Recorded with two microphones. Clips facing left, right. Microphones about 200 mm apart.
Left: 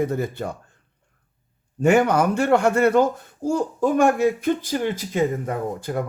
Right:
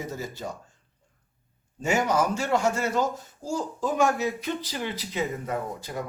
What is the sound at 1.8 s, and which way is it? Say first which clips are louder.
A man's voice: left 7 dB; 60° left (ahead or behind).